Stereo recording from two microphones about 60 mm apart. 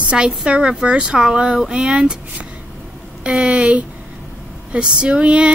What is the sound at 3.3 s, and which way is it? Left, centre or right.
Speech, centre.